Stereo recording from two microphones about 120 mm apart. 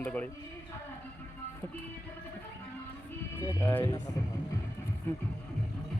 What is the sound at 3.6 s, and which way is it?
Speech, 20° left (ahead or behind).